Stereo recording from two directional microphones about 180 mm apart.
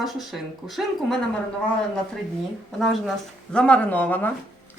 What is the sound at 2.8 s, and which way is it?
Speech, centre (ahead or behind).